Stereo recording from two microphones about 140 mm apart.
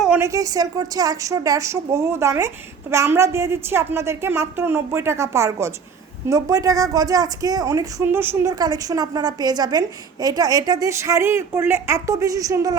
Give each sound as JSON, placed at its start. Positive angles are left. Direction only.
{"t": 0.2, "sound": "a woman's voice", "side_deg": -25}